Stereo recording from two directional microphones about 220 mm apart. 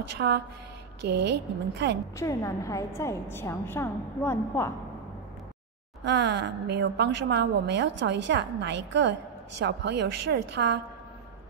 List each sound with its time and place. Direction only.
0.2 s a sound: 60° right (ahead or behind)
1.2 s a woman's voice: 50° right (ahead or behind)
2.1 s a woman's voice: 15° left (ahead or behind)
6.0 s a woman's voice: 50° right (ahead or behind)